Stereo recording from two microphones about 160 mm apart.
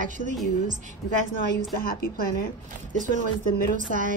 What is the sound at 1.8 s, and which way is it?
Speech, 65° left (ahead or behind).